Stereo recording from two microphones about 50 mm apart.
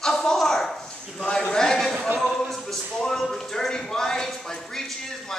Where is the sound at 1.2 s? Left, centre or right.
Centre.